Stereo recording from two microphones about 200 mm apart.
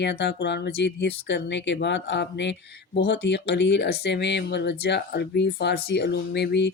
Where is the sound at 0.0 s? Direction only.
60° left (ahead or behind).